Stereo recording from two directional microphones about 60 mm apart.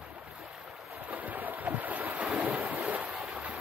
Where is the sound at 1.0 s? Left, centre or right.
Right.